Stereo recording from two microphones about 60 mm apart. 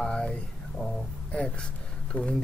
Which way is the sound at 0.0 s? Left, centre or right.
Centre.